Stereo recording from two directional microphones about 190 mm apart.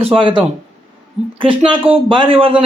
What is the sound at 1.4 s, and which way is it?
A man's voice, 25° right (ahead or behind).